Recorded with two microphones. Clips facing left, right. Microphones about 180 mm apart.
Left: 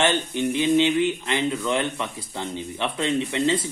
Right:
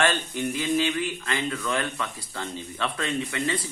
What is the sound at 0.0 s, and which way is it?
Speech, 20° left (ahead or behind).